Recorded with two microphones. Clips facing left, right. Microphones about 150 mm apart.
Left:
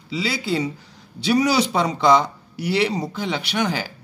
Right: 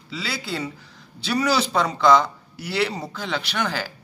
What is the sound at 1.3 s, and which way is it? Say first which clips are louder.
A man's voice: left 3 dB; 15° left (ahead or behind).